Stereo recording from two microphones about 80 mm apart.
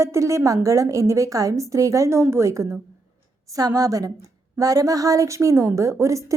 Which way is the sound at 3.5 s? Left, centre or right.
Right.